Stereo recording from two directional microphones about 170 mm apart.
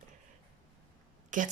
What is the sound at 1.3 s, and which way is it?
Speech, 50° right (ahead or behind).